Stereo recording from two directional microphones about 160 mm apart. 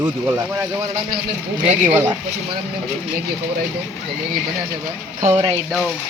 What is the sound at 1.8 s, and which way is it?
Speech, 15° right (ahead or behind).